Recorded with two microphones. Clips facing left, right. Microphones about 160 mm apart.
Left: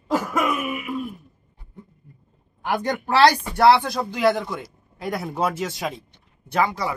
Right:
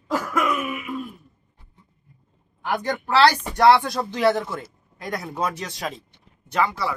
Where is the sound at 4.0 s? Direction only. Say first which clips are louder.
Even; 10° left (ahead or behind).